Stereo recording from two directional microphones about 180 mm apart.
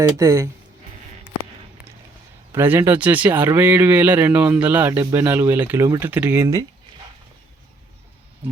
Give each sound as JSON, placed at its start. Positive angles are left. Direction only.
{"t": 0.2, "sound": "speech", "side_deg": -15}
{"t": 2.5, "sound": "speech", "side_deg": -10}